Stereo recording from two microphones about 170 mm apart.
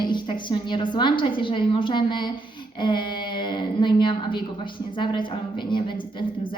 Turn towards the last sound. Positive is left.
turn(degrees=30)  # may be behind; listen again after turning